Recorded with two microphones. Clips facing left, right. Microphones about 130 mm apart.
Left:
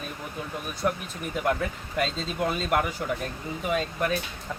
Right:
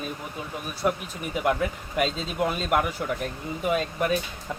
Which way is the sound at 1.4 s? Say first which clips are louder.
Right 3 dB; 5° right (ahead or behind).